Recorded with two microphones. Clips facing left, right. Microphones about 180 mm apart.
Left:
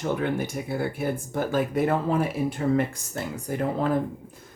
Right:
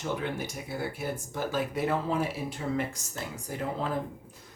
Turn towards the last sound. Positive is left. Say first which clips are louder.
# left 7 dB
turn(degrees=60)  # may be behind; listen again after turning